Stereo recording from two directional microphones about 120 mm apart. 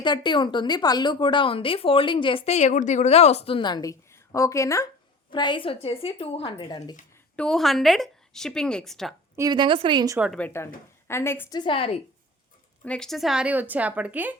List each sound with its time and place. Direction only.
0.0 s a woman's voice: 40° left (ahead or behind)
5.3 s a woman's voice: 40° left (ahead or behind)
7.3 s speech: 5° left (ahead or behind)
9.5 s speech: 40° right (ahead or behind)
10.3 s a woman's voice: 15° left (ahead or behind)
11.5 s a woman's voice: 45° left (ahead or behind)
12.8 s speech: 5° left (ahead or behind); by 14.3 s 15° right (ahead or behind)